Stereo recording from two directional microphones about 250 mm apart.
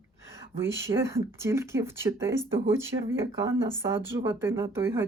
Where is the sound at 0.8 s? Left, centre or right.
Centre.